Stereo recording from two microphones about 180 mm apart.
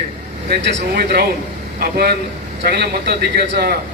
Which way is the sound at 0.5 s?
60° right (ahead or behind).